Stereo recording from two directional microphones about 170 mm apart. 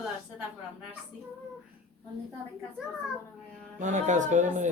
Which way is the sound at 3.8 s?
45° right (ahead or behind).